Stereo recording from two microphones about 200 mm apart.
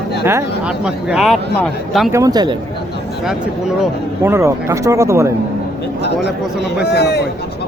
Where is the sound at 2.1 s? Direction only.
15° right (ahead or behind).